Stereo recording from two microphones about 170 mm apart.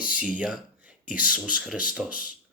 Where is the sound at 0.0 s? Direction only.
10° right (ahead or behind).